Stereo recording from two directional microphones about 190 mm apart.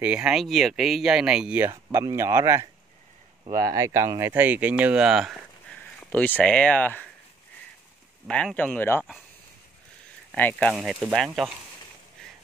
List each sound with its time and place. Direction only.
0.0 s speech: 5° right (ahead or behind)
8.3 s speech: 5° left (ahead or behind)
10.3 s speech: 10° left (ahead or behind)
10.7 s speech: 5° right (ahead or behind)